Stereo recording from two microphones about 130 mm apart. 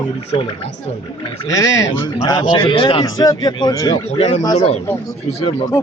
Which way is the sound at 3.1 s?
30° left (ahead or behind).